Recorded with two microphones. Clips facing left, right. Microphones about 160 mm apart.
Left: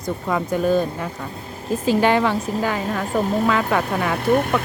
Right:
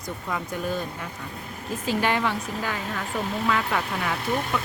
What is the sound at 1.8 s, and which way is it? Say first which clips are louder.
Speech: left 7 dB; 30° left (ahead or behind).